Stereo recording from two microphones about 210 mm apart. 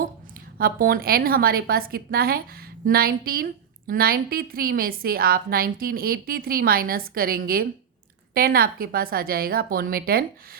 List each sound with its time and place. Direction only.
0.6 s a woman's voice: 45° right (ahead or behind)